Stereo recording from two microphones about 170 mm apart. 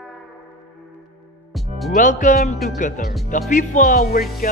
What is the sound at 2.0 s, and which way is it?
Speech, 50° left (ahead or behind).